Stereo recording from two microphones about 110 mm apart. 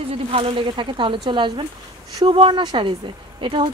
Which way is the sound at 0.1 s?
60° right (ahead or behind).